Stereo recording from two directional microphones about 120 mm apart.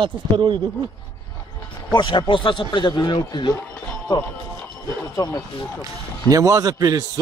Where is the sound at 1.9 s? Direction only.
40° left (ahead or behind).